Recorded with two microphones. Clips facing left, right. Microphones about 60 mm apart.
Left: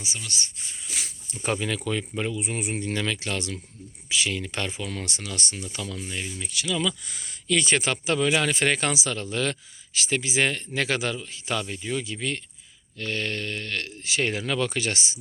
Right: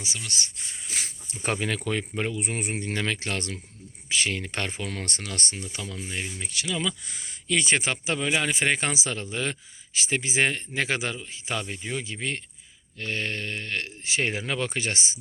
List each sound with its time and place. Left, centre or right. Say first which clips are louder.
0.2 s speech: even; right
0.9 s a sound: right 1 dB; right
1.5 s speech: left 1 dB; right